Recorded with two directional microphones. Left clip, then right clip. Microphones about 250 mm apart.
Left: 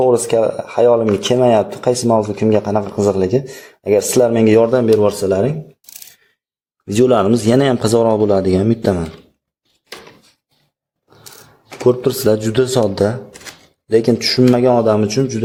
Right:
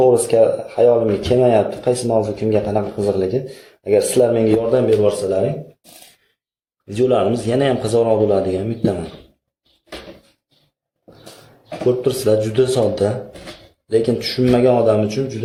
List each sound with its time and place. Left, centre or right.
0.0 s speech: left
5.0 s speech: left
6.8 s speech: left
11.9 s speech: left